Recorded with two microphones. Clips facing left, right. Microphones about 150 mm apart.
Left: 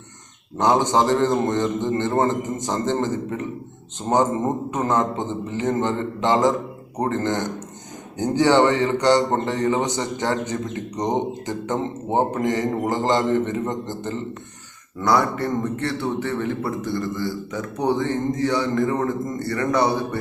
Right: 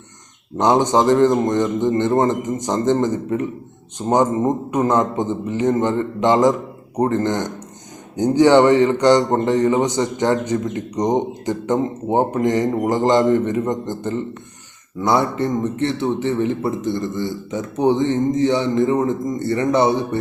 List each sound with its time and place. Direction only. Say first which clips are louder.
0.5 s a man's voice: right 3 dB; 20° right (ahead or behind)